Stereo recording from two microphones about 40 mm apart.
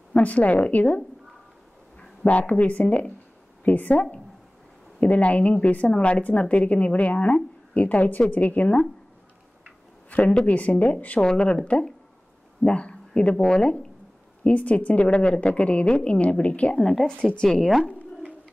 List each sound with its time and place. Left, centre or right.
0.1 s a woman's voice: left
5.0 s a woman's voice: left
10.0 s a woman's voice: left
11.1 s speech: left
14.4 s a woman's voice: left
16.8 s speech: centre
17.5 s speech: centre